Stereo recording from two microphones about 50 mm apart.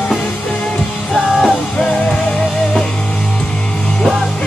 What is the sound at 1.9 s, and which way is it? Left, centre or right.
Music, centre.